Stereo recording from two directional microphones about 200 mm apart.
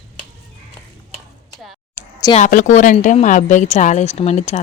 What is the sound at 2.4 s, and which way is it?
Speech, 40° left (ahead or behind).